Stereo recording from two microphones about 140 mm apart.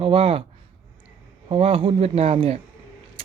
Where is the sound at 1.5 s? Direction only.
40° right (ahead or behind).